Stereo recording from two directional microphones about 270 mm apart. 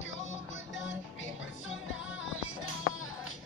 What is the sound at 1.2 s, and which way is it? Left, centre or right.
Music, left.